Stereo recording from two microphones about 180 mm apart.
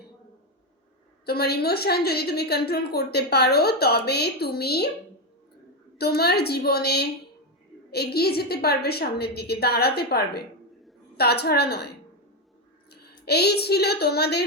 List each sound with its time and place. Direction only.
1.2 s a woman's voice: 60° left (ahead or behind)
6.0 s a woman's voice: 60° left (ahead or behind)